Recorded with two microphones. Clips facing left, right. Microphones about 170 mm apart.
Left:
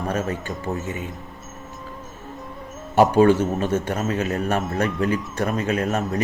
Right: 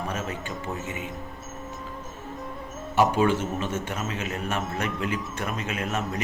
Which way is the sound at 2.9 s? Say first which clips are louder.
Left 7 dB; 45° left (ahead or behind).